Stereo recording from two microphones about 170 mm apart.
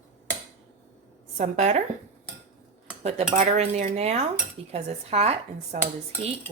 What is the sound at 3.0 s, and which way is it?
Cutlery, 40° right (ahead or behind).